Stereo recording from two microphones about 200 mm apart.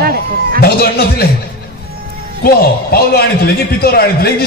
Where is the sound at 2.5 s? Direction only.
50° left (ahead or behind).